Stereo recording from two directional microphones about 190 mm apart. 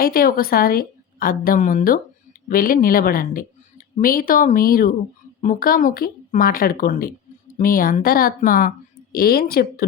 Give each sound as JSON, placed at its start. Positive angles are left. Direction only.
{"t": 0.0, "sound": "a woman's voice", "side_deg": 50}